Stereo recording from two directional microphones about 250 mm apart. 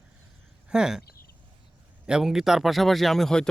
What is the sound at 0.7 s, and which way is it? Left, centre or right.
Speech, centre.